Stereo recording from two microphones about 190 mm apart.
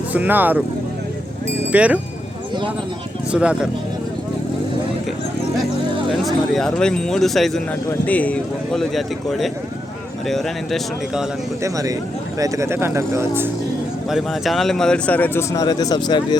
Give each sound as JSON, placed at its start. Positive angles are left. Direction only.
{"t": 0.1, "sound": "speech", "side_deg": -10}
{"t": 1.7, "sound": "speech", "side_deg": -5}
{"t": 3.3, "sound": "speech", "side_deg": -5}
{"t": 6.1, "sound": "speech", "side_deg": 0}
{"t": 11.6, "sound": "speech", "side_deg": -20}
{"t": 14.1, "sound": "speech", "side_deg": 0}